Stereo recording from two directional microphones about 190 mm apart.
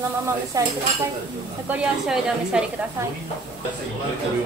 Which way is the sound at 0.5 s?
15° right (ahead or behind).